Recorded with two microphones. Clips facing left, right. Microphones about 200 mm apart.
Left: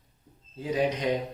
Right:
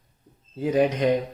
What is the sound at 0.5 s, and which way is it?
Speech, 55° right (ahead or behind).